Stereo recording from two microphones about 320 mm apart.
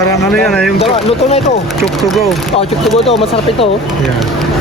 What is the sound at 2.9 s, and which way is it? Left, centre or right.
Speech, centre.